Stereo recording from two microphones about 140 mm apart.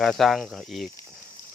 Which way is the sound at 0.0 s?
Centre (ahead or behind).